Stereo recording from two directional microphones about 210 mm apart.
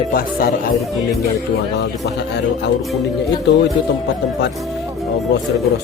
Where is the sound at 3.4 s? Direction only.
55° left (ahead or behind).